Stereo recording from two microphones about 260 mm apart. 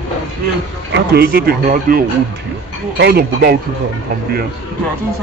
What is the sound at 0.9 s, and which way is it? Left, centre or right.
Speech, right.